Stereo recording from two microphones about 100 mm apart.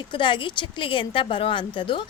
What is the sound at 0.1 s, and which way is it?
Speech, 55° left (ahead or behind).